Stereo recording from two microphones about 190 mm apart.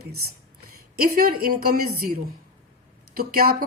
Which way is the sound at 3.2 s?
50° right (ahead or behind).